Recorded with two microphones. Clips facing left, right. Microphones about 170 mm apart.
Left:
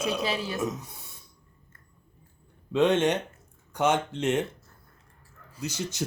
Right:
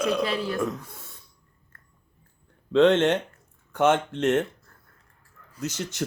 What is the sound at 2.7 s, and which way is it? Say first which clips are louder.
Speech: right 4 dB; 10° left (ahead or behind).